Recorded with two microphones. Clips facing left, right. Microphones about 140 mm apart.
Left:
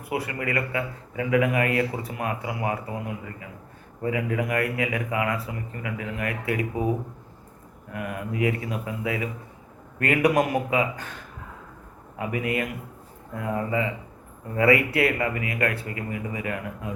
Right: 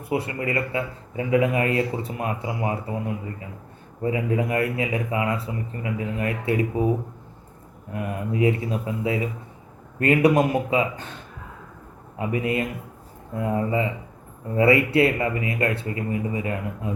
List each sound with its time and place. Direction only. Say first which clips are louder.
0.0 s speech: right 3 dB; 25° right (ahead or behind)
4.0 s speech: right 2 dB; 25° right (ahead or behind)
7.9 s speech: right 3 dB; 30° right (ahead or behind)